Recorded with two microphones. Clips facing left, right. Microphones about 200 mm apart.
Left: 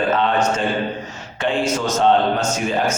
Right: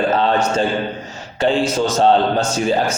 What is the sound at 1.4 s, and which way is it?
A man's voice, 30° right (ahead or behind).